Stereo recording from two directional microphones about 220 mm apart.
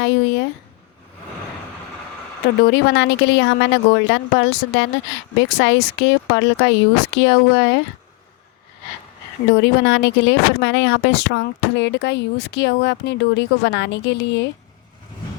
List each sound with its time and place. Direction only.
0.0 s speech: 55° left (ahead or behind)
2.6 s speech: 50° left (ahead or behind)
9.5 s speech: 55° left (ahead or behind)